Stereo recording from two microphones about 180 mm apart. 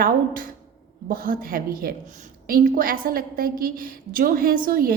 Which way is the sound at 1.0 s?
50° right (ahead or behind).